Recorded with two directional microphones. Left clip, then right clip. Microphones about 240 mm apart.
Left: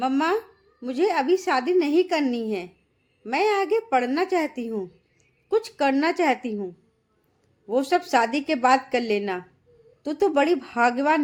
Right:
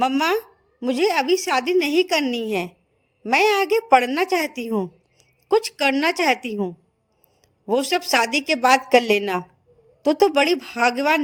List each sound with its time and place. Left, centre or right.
0.0 s a woman's voice: right